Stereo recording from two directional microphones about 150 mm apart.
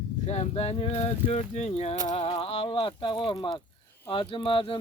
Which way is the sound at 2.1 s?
45° left (ahead or behind).